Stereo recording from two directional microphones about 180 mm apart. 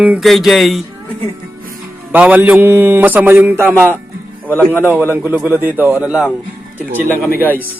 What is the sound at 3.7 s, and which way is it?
Speech, 10° left (ahead or behind).